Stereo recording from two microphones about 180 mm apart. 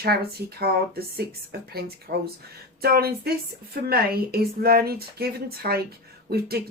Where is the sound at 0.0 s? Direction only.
60° right (ahead or behind).